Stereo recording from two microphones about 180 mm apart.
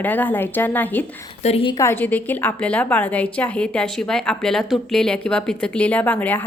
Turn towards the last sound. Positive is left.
turn(degrees=10)  # may be behind; listen again after turning